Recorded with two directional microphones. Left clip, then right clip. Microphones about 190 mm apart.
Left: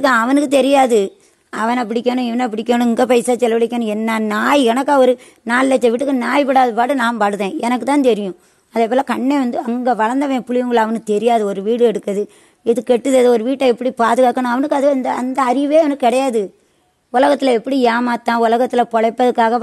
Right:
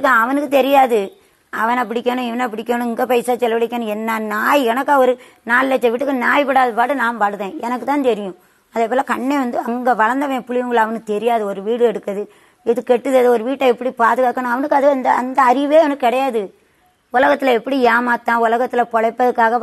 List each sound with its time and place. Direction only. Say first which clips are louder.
0.0 s speech: left 1 dB; 60° left (ahead or behind)
8.7 s a woman's voice: left 1 dB; 45° left (ahead or behind)
10.1 s speech: left 2 dB; 50° left (ahead or behind)
16.0 s a woman's voice: left 2 dB; 60° left (ahead or behind)
17.1 s speech: left 1 dB; 45° left (ahead or behind)